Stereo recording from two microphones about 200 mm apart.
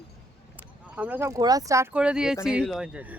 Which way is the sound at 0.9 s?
10° right (ahead or behind).